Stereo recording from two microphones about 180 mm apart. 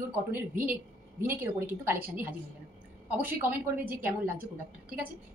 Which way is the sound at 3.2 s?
10° right (ahead or behind).